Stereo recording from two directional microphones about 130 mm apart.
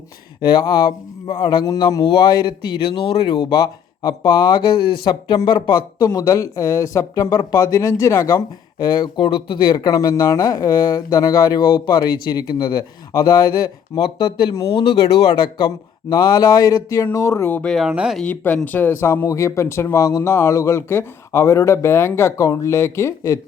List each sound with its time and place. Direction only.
0.4 s speech: 35° left (ahead or behind)
2.0 s speech: 40° left (ahead or behind)
14.0 s speech: 40° left (ahead or behind); by 17.7 s 15° left (ahead or behind)
17.7 s speech: centre (ahead or behind)
18.2 s speech: 10° left (ahead or behind)